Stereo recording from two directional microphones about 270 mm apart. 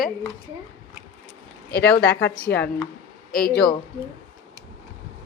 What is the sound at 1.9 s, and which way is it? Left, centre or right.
Speech, left.